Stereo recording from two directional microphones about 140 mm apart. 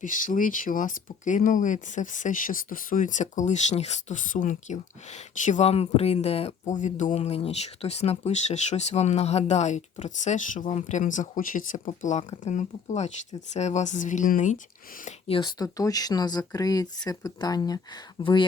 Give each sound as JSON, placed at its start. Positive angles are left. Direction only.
{"t": 0.0, "sound": "speech", "side_deg": 70}
{"t": 6.7, "sound": "speech", "side_deg": 60}
{"t": 15.3, "sound": "speech", "side_deg": 30}